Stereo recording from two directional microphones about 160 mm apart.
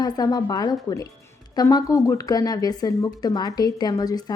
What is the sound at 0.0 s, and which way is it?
Speech, 25° left (ahead or behind).